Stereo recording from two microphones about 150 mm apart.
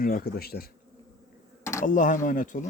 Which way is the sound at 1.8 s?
60° left (ahead or behind).